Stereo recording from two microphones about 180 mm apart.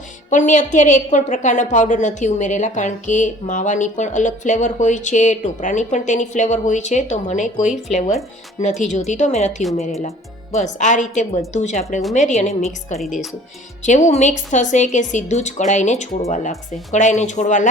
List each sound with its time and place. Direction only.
0.3 s a woman's voice: 45° left (ahead or behind)
7.6 s speech: 5° right (ahead or behind)
7.9 s a woman's voice: 40° left (ahead or behind)